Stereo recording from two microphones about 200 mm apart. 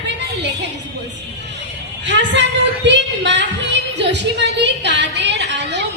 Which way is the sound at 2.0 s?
60° right (ahead or behind).